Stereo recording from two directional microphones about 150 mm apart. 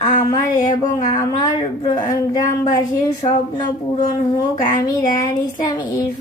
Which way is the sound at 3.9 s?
25° left (ahead or behind).